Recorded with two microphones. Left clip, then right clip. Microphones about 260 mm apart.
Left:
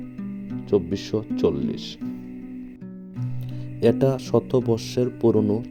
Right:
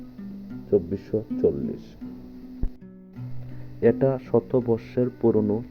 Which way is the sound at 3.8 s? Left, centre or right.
Left.